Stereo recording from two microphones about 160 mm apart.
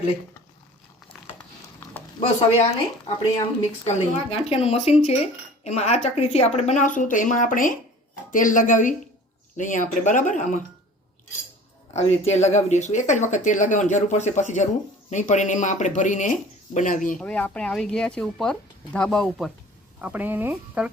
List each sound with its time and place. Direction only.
2.2 s speech: 40° left (ahead or behind)
3.8 s speech: 40° left (ahead or behind)
11.9 s speech: 45° left (ahead or behind)
17.2 s speech: 5° left (ahead or behind)
20.0 s speech: 10° right (ahead or behind)